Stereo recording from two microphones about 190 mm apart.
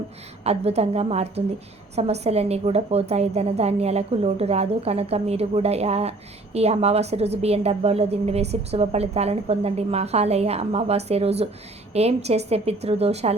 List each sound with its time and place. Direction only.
0.4 s a woman's voice: 35° right (ahead or behind)